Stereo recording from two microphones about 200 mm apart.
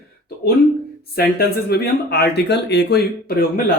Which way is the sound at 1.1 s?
50° left (ahead or behind).